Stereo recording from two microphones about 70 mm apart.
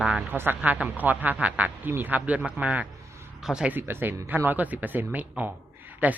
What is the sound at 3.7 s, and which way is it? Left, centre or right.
Speech, right.